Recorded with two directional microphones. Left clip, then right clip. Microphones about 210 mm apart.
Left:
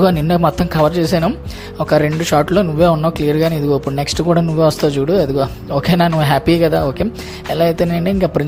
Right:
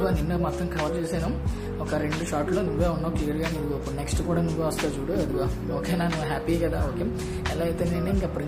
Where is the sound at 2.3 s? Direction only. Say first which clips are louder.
Left 13 dB; 45° left (ahead or behind).